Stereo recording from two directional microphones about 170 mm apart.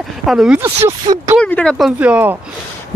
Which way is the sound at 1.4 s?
5° left (ahead or behind).